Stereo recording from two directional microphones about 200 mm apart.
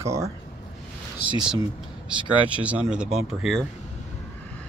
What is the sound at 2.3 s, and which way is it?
Speech, 25° right (ahead or behind).